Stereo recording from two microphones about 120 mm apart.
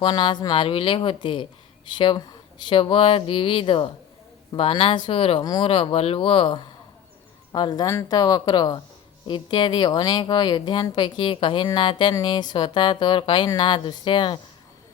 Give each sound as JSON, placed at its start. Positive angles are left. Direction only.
{"t": 0.0, "sound": "speech", "side_deg": 40}
{"t": 5.4, "sound": "speech", "side_deg": 35}
{"t": 5.6, "sound": "speech", "side_deg": 50}
{"t": 7.5, "sound": "speech", "side_deg": 35}